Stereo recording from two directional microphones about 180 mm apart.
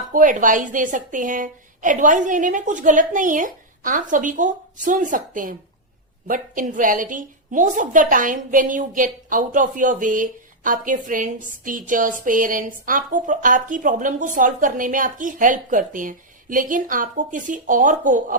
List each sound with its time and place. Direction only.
0.1 s a woman's voice: 45° right (ahead or behind)